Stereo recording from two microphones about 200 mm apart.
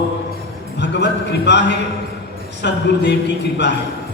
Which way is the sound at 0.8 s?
60° left (ahead or behind).